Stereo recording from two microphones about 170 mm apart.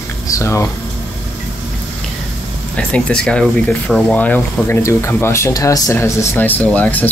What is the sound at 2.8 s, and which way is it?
Speech, 5° left (ahead or behind).